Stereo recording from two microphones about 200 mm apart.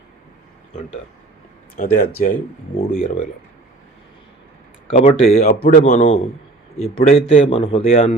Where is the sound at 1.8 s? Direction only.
40° left (ahead or behind).